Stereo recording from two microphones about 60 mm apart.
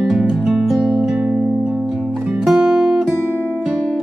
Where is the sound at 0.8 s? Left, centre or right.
Centre.